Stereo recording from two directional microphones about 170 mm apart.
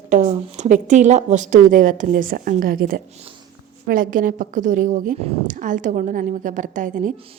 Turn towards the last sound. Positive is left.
turn(degrees=-50)  # may be behind; listen again after turning